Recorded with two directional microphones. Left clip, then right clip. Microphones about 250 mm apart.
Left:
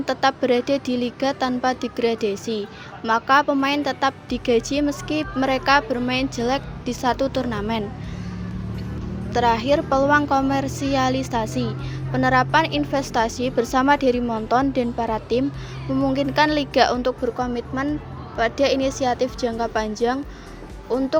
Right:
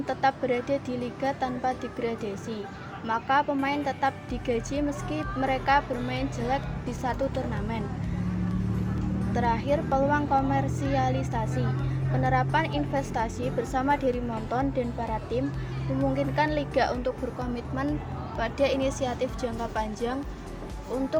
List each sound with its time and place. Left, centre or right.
0.0 s speech: left
9.3 s a woman's voice: left